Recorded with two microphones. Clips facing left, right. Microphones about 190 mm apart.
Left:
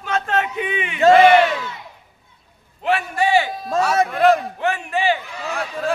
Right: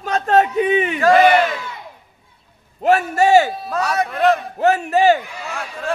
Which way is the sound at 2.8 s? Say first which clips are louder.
Right 5 dB; 45° right (ahead or behind).